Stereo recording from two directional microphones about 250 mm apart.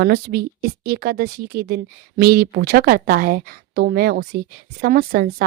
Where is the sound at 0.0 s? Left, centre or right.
Right.